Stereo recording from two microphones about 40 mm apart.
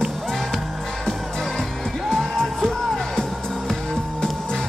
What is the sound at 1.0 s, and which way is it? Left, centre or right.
Music, centre.